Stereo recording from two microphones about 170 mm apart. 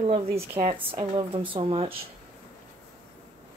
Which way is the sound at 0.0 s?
35° right (ahead or behind).